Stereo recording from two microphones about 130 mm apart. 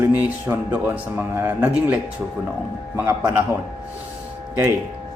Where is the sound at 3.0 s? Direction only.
15° right (ahead or behind).